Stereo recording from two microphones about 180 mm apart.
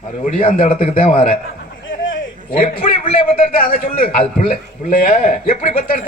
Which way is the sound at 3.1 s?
55° left (ahead or behind).